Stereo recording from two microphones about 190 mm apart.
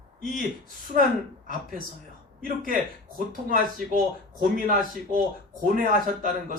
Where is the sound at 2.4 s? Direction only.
50° right (ahead or behind).